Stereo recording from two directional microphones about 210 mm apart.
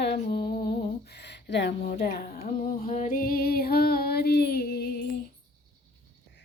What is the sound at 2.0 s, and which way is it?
Female singing, 50° left (ahead or behind).